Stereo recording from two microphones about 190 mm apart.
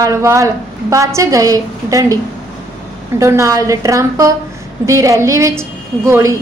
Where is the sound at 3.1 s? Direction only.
15° right (ahead or behind).